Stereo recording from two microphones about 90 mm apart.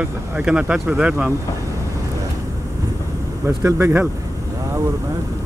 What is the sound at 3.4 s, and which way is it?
Speech, 30° right (ahead or behind).